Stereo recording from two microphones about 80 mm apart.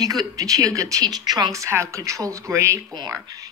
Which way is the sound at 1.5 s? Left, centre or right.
Right.